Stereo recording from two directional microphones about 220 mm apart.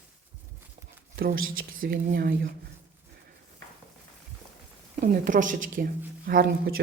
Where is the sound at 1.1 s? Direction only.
40° right (ahead or behind).